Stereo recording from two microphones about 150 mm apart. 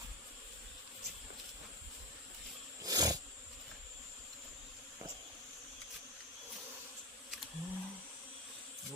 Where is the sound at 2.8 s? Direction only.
25° right (ahead or behind).